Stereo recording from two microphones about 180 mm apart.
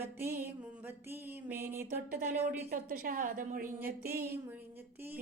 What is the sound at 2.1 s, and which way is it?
A woman's voice, 55° right (ahead or behind).